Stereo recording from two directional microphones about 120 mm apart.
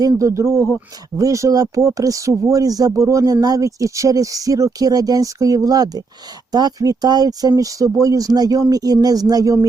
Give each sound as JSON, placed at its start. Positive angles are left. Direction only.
{"t": 0.0, "sound": "speech", "side_deg": -25}